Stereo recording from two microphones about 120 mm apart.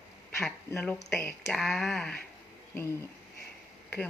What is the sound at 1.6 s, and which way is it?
Speech, centre (ahead or behind).